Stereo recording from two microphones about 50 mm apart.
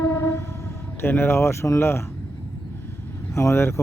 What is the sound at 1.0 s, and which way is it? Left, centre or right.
Speech, left.